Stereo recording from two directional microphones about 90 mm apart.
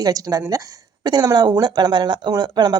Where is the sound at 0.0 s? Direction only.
45° right (ahead or behind).